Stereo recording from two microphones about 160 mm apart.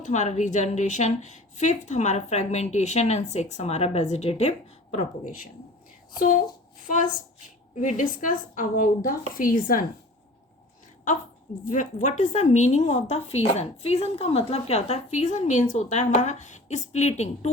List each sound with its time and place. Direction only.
0.0 s a woman's voice: 45° left (ahead or behind)
11.6 s a woman's voice: 50° left (ahead or behind)